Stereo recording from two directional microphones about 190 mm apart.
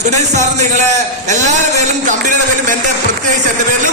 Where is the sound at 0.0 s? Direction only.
40° right (ahead or behind).